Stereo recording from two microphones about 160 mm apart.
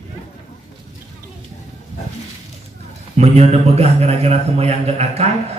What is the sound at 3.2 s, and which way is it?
A man's voice, 40° right (ahead or behind).